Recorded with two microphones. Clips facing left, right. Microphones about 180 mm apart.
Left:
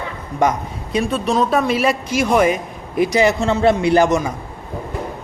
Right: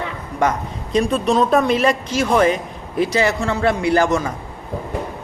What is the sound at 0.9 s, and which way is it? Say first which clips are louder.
A man's voice: right 1 dB; centre (ahead or behind).